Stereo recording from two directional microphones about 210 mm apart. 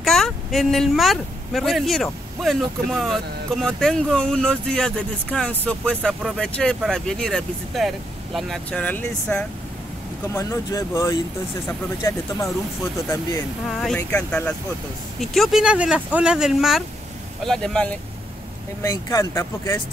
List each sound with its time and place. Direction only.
0.0 s speech: centre (ahead or behind)
13.7 s speech: centre (ahead or behind)
18.8 s speech: 15° left (ahead or behind)